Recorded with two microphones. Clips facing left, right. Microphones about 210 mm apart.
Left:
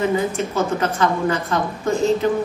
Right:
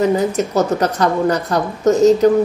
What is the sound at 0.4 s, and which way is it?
A woman's voice, 40° right (ahead or behind).